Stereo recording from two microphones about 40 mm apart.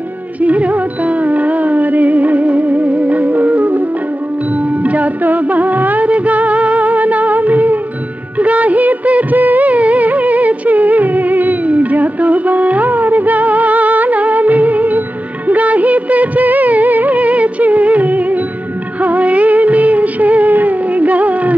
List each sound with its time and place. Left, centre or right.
0.4 s music: right
8.4 s music of bollywood: right